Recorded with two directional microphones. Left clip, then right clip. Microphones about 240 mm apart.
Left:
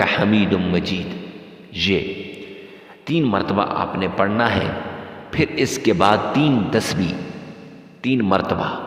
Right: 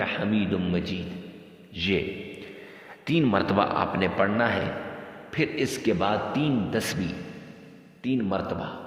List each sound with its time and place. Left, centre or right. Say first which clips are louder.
0.0 s a man's voice: left 10 dB; left
3.1 s a man's voice: left 4 dB; centre; by 8.7 s left